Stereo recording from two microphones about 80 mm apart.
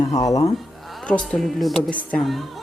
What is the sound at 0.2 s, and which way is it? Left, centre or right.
Speech, left.